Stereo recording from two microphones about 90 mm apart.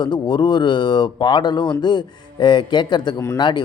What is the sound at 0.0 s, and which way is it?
Speech, 55° left (ahead or behind).